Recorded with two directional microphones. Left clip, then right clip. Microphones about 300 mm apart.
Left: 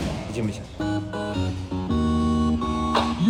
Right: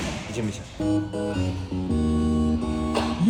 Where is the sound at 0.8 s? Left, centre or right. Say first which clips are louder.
Right 2 dB; left.